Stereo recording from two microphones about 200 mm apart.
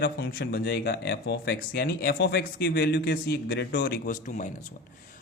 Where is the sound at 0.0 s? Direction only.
50° left (ahead or behind).